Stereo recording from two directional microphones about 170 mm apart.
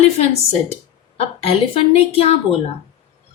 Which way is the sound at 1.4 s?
35° left (ahead or behind).